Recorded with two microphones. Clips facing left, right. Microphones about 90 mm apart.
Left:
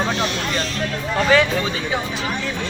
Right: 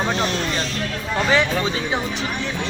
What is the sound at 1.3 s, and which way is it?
Speech, 25° right (ahead or behind).